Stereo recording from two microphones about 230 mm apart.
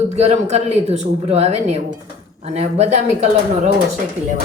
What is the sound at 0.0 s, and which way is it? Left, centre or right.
Speech, right.